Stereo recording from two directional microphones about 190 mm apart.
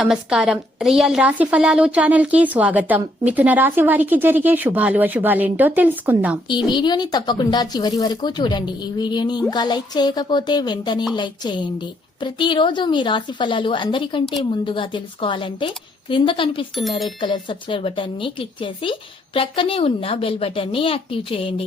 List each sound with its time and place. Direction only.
0.0 s a woman's voice: 5° right (ahead or behind)
6.5 s speech: 25° left (ahead or behind)